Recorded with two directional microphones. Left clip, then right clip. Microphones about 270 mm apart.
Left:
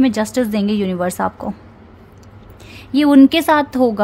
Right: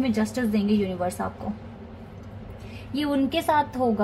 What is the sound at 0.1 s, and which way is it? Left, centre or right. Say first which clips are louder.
Speech: left 8 dB; left.